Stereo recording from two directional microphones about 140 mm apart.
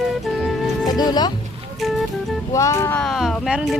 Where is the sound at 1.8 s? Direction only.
Centre (ahead or behind).